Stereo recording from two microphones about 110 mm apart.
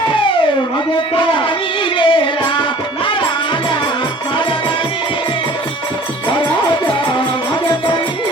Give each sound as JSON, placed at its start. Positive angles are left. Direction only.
{"t": 1.1, "sound": "music", "side_deg": 50}